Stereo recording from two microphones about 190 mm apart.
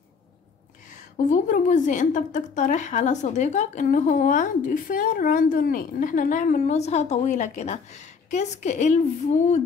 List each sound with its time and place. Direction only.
1.1 s a woman's voice: 40° left (ahead or behind)